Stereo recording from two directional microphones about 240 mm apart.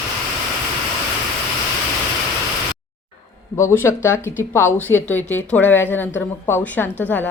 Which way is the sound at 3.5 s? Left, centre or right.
Centre.